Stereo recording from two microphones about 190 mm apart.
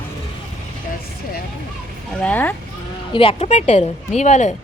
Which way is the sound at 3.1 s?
30° left (ahead or behind).